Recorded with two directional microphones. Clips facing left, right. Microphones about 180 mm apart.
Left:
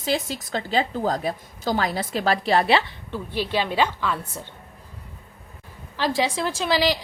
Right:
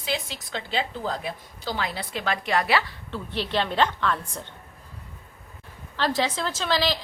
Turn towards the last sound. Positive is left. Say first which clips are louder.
# left 3 dB
turn(degrees=10)  # may be behind; listen again after turning